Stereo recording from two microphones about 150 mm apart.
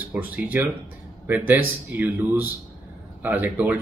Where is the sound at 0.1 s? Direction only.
10° right (ahead or behind).